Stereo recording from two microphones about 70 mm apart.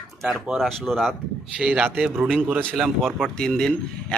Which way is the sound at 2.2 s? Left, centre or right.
Centre.